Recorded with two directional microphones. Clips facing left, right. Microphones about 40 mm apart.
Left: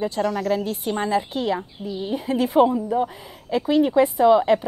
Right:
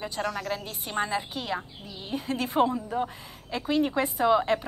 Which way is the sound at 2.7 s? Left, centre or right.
Centre.